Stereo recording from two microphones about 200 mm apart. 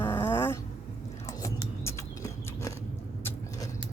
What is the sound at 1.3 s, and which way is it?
Biting, 15° left (ahead or behind).